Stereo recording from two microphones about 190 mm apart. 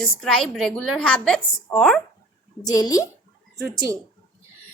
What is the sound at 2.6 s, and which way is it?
Speech, 20° left (ahead or behind).